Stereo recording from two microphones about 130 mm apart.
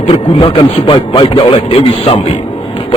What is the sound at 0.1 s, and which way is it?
A man's voice, 45° left (ahead or behind).